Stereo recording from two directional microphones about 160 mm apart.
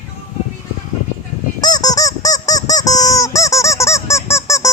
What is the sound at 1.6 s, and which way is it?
Squeak, 25° left (ahead or behind).